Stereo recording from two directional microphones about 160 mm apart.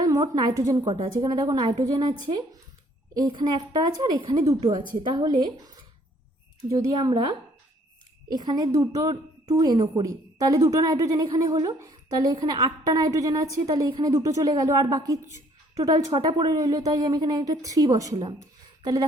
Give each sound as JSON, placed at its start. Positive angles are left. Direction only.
{"t": 0.0, "sound": "a woman's voice", "side_deg": -25}